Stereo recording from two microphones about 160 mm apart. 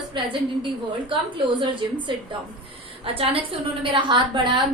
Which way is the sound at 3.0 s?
35° right (ahead or behind).